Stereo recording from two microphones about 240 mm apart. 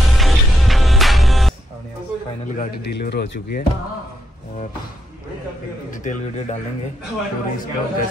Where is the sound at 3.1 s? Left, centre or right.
Left.